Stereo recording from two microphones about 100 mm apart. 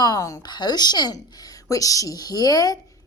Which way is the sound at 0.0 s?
35° left (ahead or behind).